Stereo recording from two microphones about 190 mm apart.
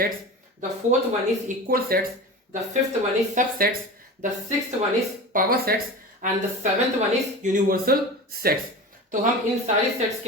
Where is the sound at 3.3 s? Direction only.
50° right (ahead or behind).